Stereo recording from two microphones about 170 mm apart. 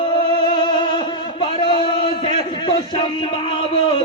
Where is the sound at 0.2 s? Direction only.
30° left (ahead or behind).